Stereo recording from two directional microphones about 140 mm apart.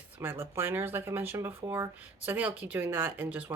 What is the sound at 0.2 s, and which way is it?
Speech, 15° right (ahead or behind).